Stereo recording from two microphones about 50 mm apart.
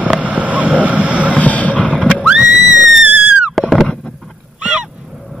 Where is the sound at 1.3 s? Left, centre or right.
Left.